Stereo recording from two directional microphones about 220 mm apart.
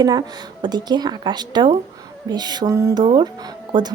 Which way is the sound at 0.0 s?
20° right (ahead or behind).